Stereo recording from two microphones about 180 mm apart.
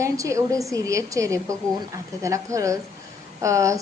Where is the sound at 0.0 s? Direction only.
15° right (ahead or behind).